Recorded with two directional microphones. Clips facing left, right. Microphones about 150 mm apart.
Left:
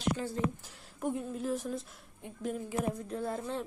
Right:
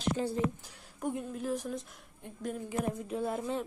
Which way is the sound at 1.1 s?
Centre (ahead or behind).